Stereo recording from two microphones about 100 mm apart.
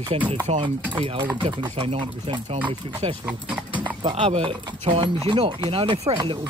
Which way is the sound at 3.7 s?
55° right (ahead or behind).